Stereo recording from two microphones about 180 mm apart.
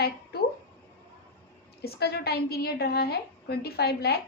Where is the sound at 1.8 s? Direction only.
60° left (ahead or behind).